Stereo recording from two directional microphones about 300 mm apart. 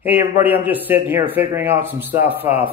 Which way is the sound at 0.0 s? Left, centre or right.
Centre.